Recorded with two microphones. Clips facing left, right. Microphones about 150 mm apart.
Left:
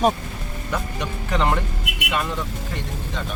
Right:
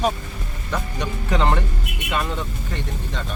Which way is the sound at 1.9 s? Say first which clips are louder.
Left 1 dB; 90° left.